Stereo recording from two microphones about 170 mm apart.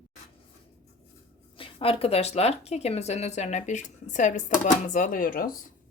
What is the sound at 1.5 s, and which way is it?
Speech, 35° left (ahead or behind).